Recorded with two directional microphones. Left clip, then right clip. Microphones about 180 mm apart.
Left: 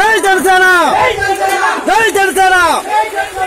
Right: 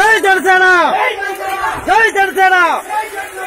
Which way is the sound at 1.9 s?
5° left (ahead or behind).